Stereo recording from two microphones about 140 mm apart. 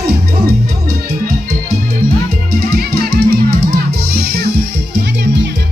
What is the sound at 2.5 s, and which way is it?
Music, 90° right.